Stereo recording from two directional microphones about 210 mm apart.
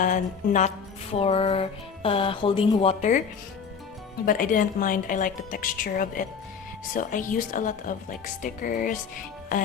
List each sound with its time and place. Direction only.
0.0 s speech: 35° left (ahead or behind)
4.3 s speech: 40° left (ahead or behind)